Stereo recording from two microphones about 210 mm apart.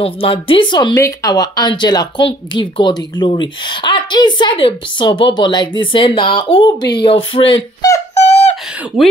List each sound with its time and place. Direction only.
0.0 s a woman's voice: 25° left (ahead or behind)
8.1 s beatboxing: 30° left (ahead or behind)